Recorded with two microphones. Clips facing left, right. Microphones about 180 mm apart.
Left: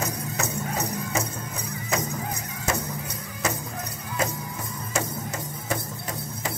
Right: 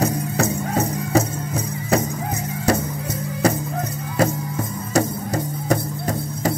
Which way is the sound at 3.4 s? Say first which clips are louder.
Right 10 dB; 35° right (ahead or behind).